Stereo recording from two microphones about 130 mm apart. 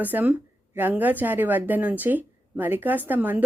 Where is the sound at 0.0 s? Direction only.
15° right (ahead or behind).